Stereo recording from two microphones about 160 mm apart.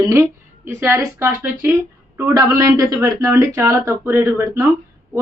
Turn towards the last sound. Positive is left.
turn(degrees=-15)  # may be behind; listen again after turning